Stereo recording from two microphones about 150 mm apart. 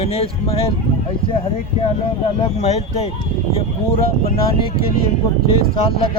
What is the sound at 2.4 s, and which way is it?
Speech, 45° left (ahead or behind).